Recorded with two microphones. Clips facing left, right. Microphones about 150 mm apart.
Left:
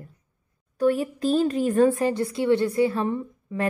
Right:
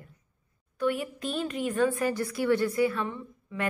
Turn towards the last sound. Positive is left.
turn(degrees=35)  # may be behind; listen again after turning